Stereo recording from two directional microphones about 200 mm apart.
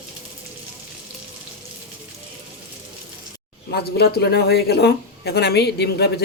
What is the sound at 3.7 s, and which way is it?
Speech, 50° left (ahead or behind).